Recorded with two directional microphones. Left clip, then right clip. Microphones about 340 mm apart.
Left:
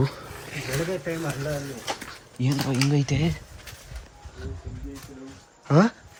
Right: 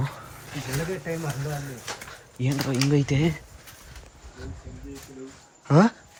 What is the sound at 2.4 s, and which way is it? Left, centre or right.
Speech, centre.